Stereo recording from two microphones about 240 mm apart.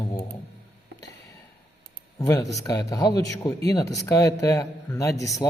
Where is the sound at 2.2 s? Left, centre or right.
Centre.